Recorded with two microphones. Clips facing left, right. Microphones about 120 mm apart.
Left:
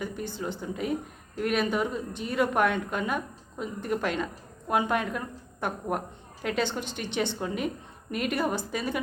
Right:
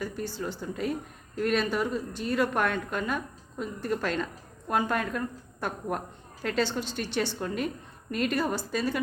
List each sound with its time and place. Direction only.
0.0 s a woman's voice: 15° left (ahead or behind)